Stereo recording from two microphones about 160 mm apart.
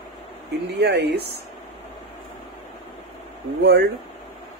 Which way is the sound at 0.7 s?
90° right.